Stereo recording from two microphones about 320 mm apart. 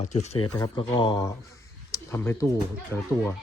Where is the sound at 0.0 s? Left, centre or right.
Left.